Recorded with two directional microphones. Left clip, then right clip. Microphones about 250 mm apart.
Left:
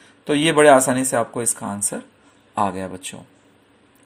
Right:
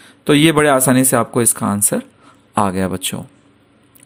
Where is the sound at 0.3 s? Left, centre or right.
Right.